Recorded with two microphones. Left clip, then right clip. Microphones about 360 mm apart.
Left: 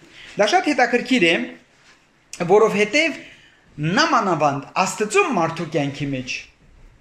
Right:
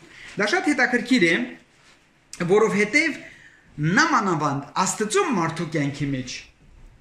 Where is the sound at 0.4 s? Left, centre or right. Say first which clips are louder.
Left 4 dB; centre.